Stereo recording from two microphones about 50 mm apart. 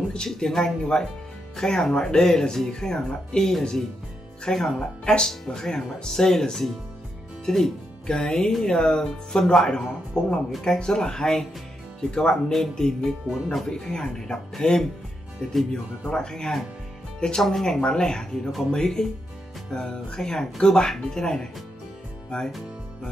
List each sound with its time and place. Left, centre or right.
0.1 s speech: centre
5.0 s speech: centre
16.0 s speech: centre